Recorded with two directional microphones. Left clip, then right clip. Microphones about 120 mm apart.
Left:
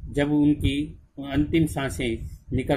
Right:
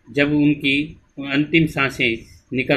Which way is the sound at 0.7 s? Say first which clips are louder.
Right 8 dB; 65° left (ahead or behind).